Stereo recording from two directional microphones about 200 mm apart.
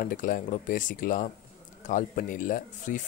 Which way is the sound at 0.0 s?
40° left (ahead or behind).